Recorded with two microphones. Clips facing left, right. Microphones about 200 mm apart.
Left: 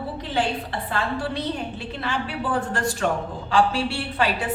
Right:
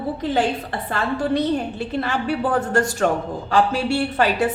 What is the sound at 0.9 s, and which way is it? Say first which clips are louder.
A woman's voice: right 6 dB; 45° right (ahead or behind).